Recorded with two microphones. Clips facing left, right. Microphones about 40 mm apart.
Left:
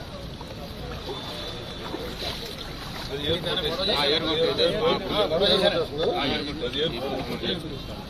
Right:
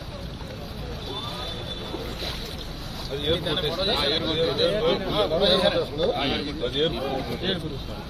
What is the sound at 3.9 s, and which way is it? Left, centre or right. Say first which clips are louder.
Speech: left 4 dB; left.